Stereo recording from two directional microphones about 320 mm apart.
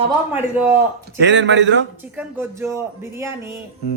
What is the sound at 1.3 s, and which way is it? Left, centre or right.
Speech, right.